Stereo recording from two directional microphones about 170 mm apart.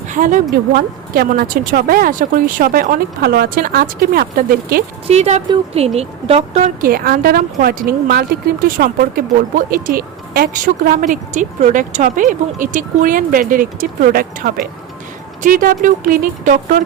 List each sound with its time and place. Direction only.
0.1 s speech: 50° right (ahead or behind)
0.7 s a woman's voice: 60° right (ahead or behind)
5.0 s a woman's voice: 40° right (ahead or behind)